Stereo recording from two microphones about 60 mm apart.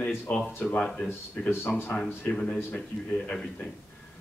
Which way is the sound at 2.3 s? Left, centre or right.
Centre.